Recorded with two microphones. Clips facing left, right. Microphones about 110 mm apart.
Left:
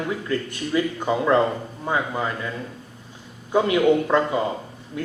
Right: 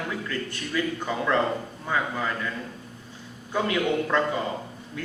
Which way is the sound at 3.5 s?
20° left (ahead or behind).